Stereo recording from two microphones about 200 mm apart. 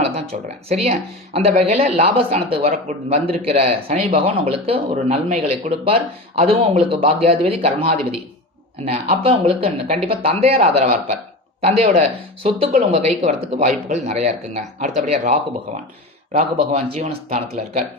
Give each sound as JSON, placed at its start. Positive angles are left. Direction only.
{"t": 0.4, "sound": "speech", "side_deg": -30}